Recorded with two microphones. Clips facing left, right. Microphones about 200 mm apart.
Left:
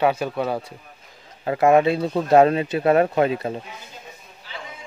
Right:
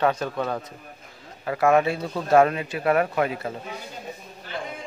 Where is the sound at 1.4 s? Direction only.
20° left (ahead or behind).